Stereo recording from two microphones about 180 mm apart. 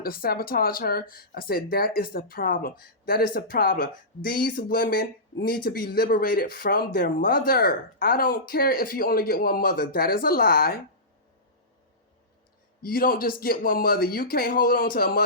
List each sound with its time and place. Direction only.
0.0 s speech: 55° left (ahead or behind)
12.8 s speech: 55° left (ahead or behind)